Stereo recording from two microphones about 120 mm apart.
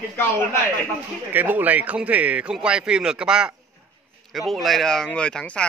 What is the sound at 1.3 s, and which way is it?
Speech, 15° right (ahead or behind).